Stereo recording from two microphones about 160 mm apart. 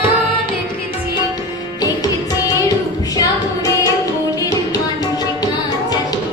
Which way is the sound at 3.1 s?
20° left (ahead or behind).